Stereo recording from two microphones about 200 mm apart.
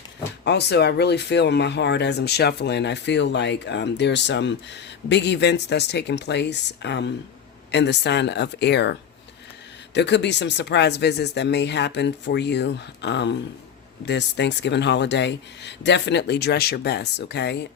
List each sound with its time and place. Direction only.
0.4 s speech: 55° left (ahead or behind)